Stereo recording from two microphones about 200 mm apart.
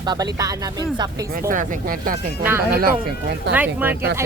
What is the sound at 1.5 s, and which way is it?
Speech, 45° right (ahead or behind).